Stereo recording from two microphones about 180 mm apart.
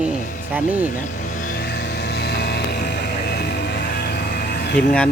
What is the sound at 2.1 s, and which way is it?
Music, 65° left (ahead or behind).